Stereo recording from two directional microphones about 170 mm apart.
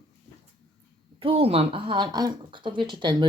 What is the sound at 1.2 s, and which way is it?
Speech, 35° right (ahead or behind).